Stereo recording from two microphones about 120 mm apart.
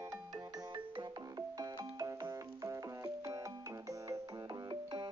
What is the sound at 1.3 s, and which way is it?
Music, 30° right (ahead or behind).